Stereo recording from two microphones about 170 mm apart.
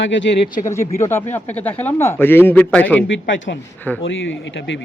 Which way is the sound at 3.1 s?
90° left.